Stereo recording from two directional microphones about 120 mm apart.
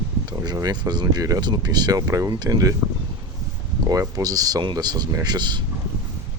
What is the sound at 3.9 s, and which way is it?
Speech, 30° right (ahead or behind).